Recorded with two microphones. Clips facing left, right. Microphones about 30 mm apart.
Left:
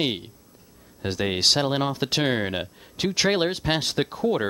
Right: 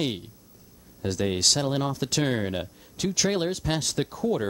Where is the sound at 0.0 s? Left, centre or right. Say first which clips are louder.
Left 3 dB; left.